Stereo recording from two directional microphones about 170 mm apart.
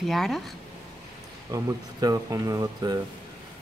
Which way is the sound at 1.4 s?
20° right (ahead or behind).